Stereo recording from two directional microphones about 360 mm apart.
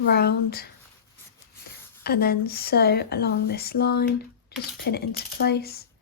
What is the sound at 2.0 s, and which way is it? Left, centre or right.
Speech, left.